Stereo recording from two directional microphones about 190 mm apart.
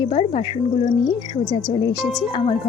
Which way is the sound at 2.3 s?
30° left (ahead or behind).